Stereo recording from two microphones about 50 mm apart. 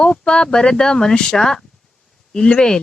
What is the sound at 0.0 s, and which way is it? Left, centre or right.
Speech, centre.